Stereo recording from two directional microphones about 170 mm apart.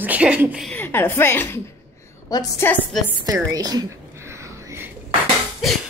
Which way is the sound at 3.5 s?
20° right (ahead or behind).